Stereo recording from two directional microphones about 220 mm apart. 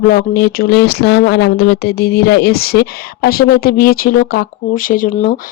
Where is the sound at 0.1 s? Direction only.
45° left (ahead or behind).